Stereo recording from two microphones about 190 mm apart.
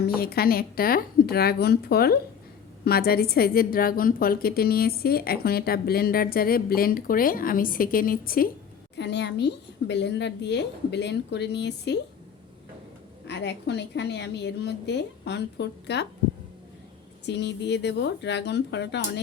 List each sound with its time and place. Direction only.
0.0 s a woman's voice: 55° left (ahead or behind)
9.0 s a woman's voice: 65° left (ahead or behind)
13.2 s a woman's voice: 65° left (ahead or behind)
17.2 s a woman's voice: 65° left (ahead or behind)